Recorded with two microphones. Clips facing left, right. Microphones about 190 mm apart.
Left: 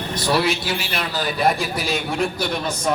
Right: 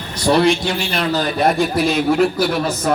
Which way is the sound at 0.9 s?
40° right (ahead or behind).